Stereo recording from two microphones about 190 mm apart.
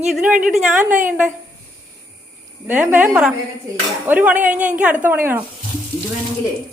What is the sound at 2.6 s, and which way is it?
A woman's voice, 10° right (ahead or behind).